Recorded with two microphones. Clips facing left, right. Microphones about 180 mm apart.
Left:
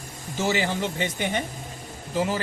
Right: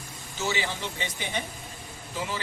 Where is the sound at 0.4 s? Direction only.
45° left (ahead or behind).